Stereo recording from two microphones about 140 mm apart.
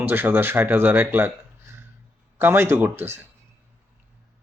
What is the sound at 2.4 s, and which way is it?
Speech, 15° right (ahead or behind).